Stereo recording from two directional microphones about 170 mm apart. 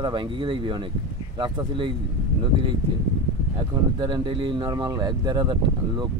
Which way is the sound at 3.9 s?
25° right (ahead or behind).